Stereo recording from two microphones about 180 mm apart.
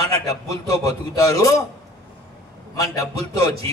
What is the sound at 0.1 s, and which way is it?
A man's voice, 20° left (ahead or behind).